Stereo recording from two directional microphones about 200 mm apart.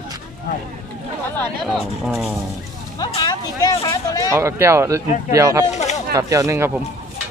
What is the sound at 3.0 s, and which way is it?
Speech, 20° left (ahead or behind).